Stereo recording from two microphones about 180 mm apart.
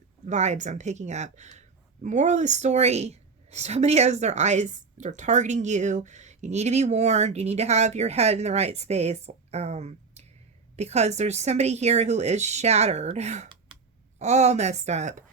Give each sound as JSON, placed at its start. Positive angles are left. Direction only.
{"t": 0.3, "sound": "speech", "side_deg": -40}